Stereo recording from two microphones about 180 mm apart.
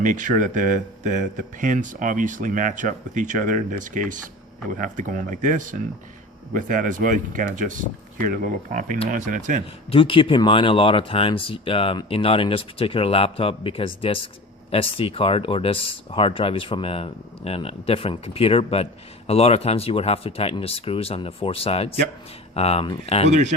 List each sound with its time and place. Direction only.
0.0 s speech: 45° right (ahead or behind)
9.9 s speech: 30° left (ahead or behind)
23.3 s speech: 40° right (ahead or behind)